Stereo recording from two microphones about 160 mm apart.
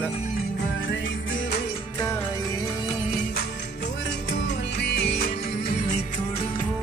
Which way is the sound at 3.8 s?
90° left.